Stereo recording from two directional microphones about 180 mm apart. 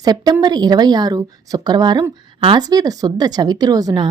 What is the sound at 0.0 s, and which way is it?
A woman's voice, 20° right (ahead or behind).